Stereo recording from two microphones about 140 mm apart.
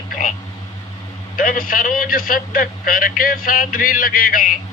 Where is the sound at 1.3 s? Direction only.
85° left.